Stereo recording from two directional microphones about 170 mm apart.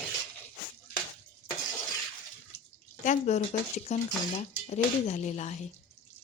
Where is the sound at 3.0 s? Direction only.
45° left (ahead or behind).